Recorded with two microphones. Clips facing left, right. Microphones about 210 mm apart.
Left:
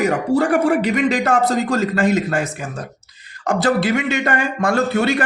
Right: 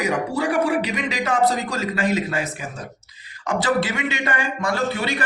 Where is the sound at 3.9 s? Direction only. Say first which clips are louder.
Left 6 dB; 45° left (ahead or behind).